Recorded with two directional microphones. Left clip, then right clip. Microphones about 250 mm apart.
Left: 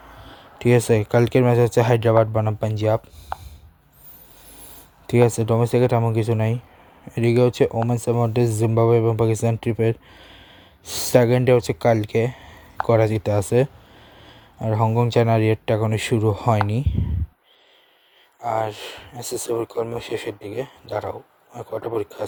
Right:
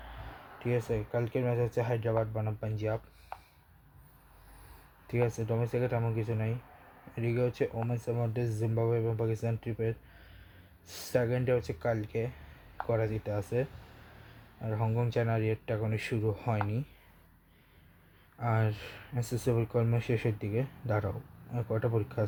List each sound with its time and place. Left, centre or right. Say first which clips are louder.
0.6 s speech: left 15 dB; left
5.0 s speech: left 14 dB; left
18.4 s speech: left 11 dB; left